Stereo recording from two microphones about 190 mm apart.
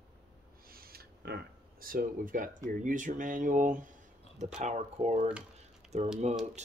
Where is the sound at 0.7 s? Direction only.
50° right (ahead or behind).